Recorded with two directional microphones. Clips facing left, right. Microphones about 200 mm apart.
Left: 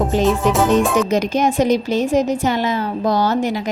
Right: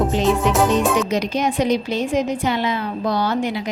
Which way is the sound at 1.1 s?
45° left (ahead or behind).